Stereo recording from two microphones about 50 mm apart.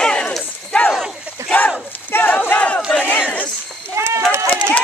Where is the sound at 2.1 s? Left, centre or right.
Left.